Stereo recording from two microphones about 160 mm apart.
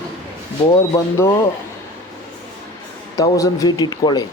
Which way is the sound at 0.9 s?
20° left (ahead or behind).